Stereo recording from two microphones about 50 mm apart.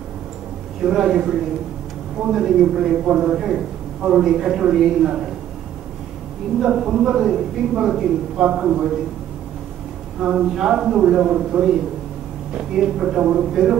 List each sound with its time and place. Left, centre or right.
0.8 s a man's voice: centre
6.6 s a man's voice: centre
10.2 s a man's voice: centre
13.5 s a man's voice: centre